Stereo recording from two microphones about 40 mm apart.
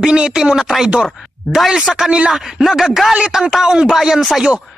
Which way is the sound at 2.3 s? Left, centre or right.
Centre.